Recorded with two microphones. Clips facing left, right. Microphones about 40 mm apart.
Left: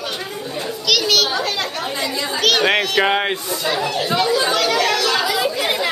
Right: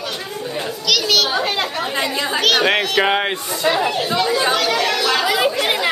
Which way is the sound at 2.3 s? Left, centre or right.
Centre.